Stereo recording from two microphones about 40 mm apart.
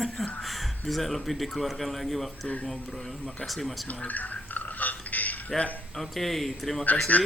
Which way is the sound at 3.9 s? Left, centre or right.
Left.